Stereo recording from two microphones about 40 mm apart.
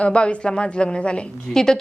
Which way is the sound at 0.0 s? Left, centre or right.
Left.